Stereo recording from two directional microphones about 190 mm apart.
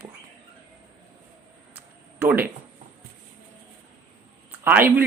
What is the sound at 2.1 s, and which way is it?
Speech, 10° right (ahead or behind).